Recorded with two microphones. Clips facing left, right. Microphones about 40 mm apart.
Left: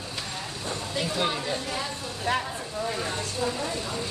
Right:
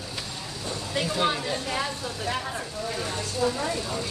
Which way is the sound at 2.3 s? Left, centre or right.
Left.